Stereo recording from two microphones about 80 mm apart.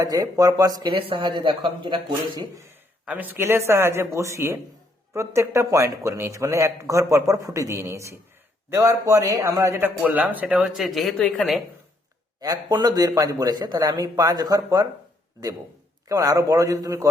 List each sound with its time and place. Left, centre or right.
0.0 s speech: right
3.1 s speech: right
3.4 s speech: right
10.1 s speech: centre
10.8 s speech: centre
12.4 s a man's voice: right
16.0 s a man's voice: right